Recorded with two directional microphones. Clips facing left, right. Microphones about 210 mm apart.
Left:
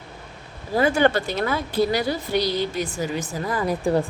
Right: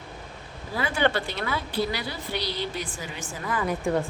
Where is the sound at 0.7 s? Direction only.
45° left (ahead or behind).